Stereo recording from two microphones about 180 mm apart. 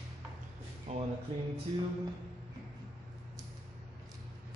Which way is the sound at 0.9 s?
35° right (ahead or behind).